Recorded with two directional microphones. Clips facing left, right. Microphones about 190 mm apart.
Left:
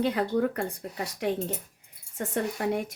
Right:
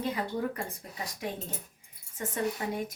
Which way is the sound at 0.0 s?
65° left (ahead or behind).